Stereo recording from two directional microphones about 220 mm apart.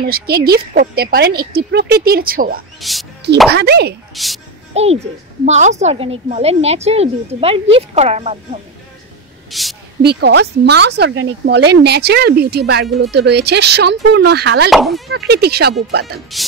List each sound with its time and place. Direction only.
0.0 s speech: 45° right (ahead or behind)
2.8 s a woman's voice: centre (ahead or behind)
3.4 s speech: 50° right (ahead or behind)
4.1 s a woman's voice: centre (ahead or behind)
4.7 s a woman's voice: 30° right (ahead or behind)
9.5 s a woman's voice: centre (ahead or behind)
10.0 s speech: 45° right (ahead or behind)
14.7 s a woman's voice: centre (ahead or behind)
15.0 s speech: 50° right (ahead or behind)